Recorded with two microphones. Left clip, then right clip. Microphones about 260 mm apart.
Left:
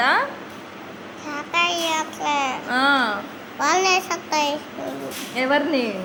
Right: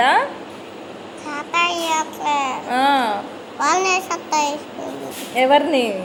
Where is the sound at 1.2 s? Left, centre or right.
Centre.